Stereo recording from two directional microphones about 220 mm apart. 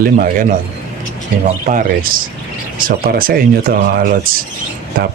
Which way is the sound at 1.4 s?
40° right (ahead or behind).